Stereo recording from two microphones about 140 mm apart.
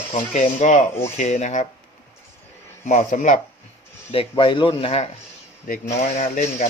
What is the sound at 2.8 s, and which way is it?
Speech, 55° left (ahead or behind).